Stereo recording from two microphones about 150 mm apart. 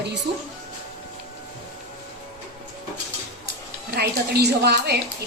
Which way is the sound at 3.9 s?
90° right.